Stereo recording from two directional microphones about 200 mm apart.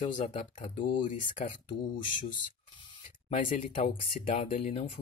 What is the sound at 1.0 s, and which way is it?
Speech, 40° left (ahead or behind).